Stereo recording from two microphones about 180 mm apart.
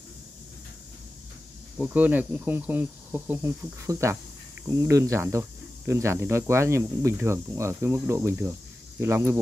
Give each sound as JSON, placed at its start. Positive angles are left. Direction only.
{"t": 1.8, "sound": "speech", "side_deg": -10}